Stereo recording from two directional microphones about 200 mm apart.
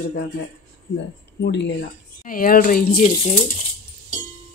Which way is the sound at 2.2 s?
45° left (ahead or behind).